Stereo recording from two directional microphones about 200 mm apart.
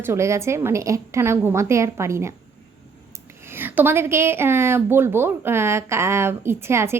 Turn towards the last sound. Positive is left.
turn(degrees=-10)  # may be behind; listen again after turning